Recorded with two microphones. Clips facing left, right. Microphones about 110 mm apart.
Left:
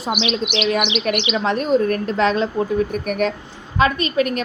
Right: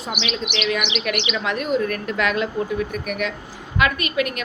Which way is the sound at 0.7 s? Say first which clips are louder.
Left 3 dB; 35° left (ahead or behind).